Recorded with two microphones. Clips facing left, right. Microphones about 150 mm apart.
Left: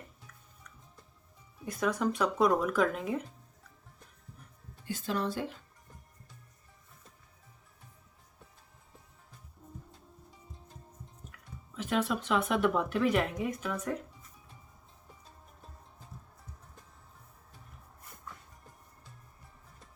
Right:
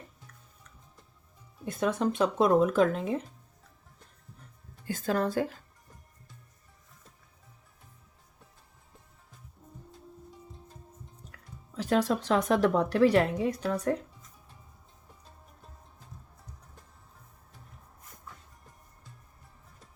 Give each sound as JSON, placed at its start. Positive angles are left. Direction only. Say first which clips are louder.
{"t": 1.6, "sound": "speech", "louder": "right 2 dB", "side_deg": -25}
{"t": 4.9, "sound": "a woman's voice", "louder": "right 4 dB", "side_deg": -45}
{"t": 11.3, "sound": "speech", "louder": "even", "side_deg": -35}
{"t": 14.1, "sound": "music", "louder": "even", "side_deg": 0}